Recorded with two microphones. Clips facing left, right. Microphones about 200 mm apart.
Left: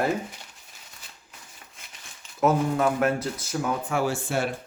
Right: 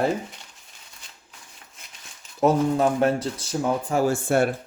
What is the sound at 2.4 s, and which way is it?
Speech, 30° right (ahead or behind).